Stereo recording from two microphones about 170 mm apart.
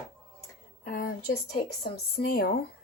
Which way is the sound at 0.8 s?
55° left (ahead or behind).